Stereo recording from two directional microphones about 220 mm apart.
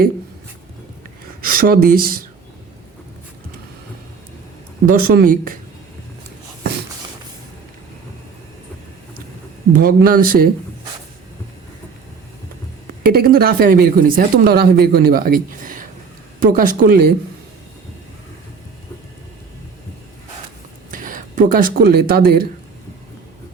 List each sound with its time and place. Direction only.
1.4 s speech: 40° right (ahead or behind)
4.9 s speech: 40° right (ahead or behind)
9.7 s speech: 40° right (ahead or behind)
13.0 s speech: 45° right (ahead or behind)
20.9 s speech: 40° right (ahead or behind)